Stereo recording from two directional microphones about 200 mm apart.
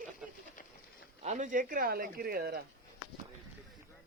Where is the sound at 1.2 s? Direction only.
35° right (ahead or behind).